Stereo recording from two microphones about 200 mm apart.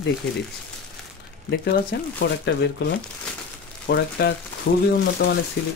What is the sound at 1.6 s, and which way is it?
Speech, 50° left (ahead or behind).